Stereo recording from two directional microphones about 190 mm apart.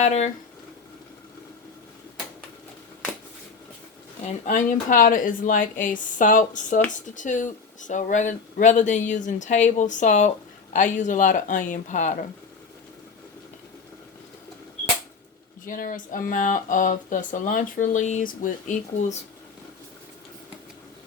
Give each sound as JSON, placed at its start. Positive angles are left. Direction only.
{"t": 0.0, "sound": "speech", "side_deg": 35}
{"t": 4.4, "sound": "speech", "side_deg": 45}
{"t": 15.6, "sound": "speech", "side_deg": 45}